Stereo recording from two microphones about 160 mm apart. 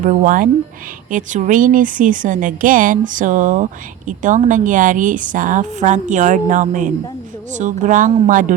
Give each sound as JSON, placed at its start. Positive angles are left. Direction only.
{"t": 0.0, "sound": "a woman's voice", "side_deg": -55}